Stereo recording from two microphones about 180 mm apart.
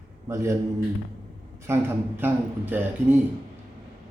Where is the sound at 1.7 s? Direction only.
15° right (ahead or behind).